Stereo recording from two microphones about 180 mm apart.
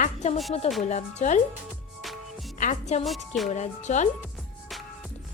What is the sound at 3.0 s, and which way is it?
Music, centre (ahead or behind).